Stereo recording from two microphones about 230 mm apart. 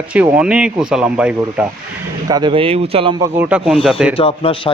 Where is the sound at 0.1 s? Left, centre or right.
Centre.